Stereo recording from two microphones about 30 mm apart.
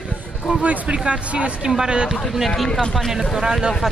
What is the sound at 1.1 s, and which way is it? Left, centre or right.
Speech, right.